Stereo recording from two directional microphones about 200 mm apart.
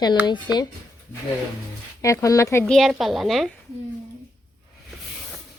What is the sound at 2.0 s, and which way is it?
Speech, 15° left (ahead or behind).